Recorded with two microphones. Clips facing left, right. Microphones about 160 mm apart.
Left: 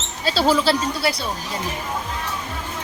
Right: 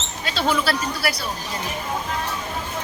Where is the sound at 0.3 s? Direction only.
35° left (ahead or behind).